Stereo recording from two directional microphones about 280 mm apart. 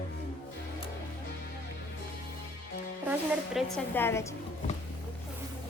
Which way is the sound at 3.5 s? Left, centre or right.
Centre.